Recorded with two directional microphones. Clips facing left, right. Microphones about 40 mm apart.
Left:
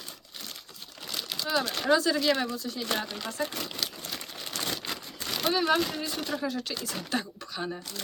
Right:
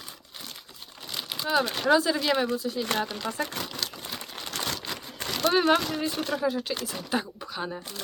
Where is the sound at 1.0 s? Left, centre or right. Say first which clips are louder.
Right 2 dB; centre.